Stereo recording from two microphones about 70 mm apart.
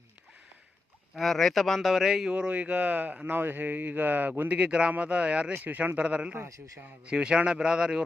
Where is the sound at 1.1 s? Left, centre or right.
Centre.